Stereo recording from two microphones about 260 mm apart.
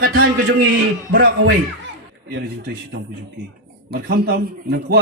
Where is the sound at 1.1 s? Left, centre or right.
Right.